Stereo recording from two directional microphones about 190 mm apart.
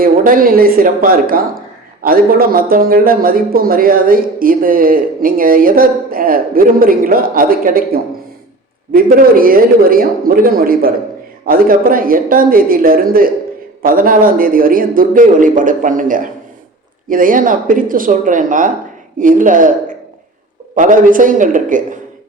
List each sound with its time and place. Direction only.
0.0 s a man's voice: 50° right (ahead or behind)
20.7 s a man's voice: 45° right (ahead or behind)